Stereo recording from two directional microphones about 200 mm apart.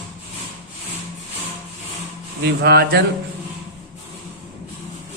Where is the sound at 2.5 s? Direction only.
55° right (ahead or behind).